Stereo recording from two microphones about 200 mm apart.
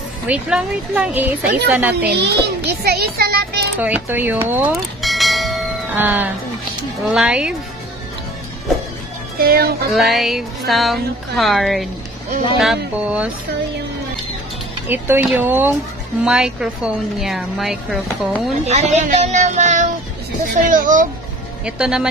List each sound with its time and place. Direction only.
0.3 s speech: 5° right (ahead or behind)
2.0 s a child's voice: 55° right (ahead or behind)
3.8 s church bell: 10° right (ahead or behind)
7.1 s speech: 5° right (ahead or behind)
9.4 s speech: 50° right (ahead or behind)
9.8 s speech: centre (ahead or behind)
14.9 s speech: 10° right (ahead or behind)
18.7 s speech: 35° right (ahead or behind)
21.6 s speech: 5° right (ahead or behind)